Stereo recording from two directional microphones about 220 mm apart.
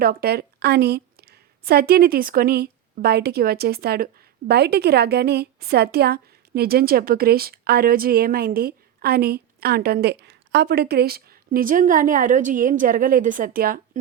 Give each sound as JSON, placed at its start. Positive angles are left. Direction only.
{"t": 0.0, "sound": "a woman's voice", "side_deg": -45}